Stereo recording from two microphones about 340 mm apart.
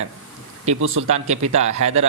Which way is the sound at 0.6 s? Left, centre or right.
Right.